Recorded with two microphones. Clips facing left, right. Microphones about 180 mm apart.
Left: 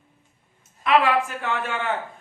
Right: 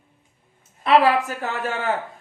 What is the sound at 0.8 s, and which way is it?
A woman's voice, 35° right (ahead or behind).